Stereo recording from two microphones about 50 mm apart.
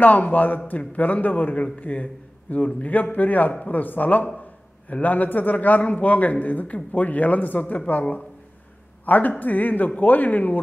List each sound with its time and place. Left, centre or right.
0.0 s a man's voice: left